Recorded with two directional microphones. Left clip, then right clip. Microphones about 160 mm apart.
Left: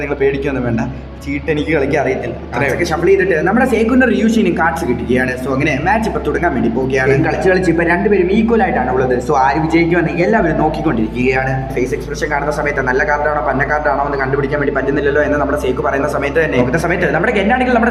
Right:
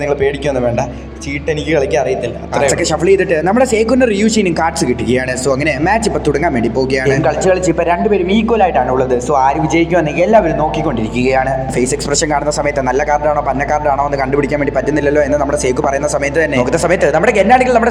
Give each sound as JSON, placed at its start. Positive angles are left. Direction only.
{"t": 3.0, "sound": "speech", "side_deg": -50}
{"t": 12.9, "sound": "a man's voice", "side_deg": -45}
{"t": 15.0, "sound": "speech", "side_deg": -40}